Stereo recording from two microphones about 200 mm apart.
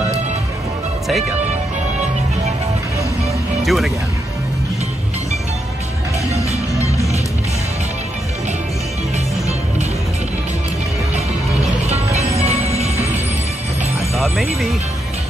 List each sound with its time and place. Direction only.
3.6 s speech: centre (ahead or behind)
12.4 s music: 30° right (ahead or behind)
14.1 s speech: centre (ahead or behind)